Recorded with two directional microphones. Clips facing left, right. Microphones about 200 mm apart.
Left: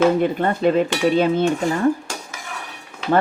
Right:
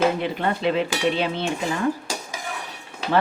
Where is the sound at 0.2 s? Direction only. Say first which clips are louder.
Left 5 dB; 45° left (ahead or behind).